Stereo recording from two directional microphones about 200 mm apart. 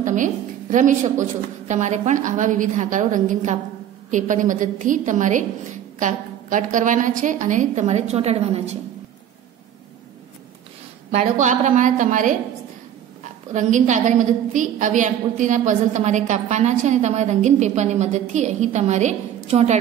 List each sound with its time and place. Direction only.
0.0 s a woman's voice: 40° right (ahead or behind)
11.1 s a woman's voice: 35° right (ahead or behind)
13.5 s a woman's voice: 40° right (ahead or behind)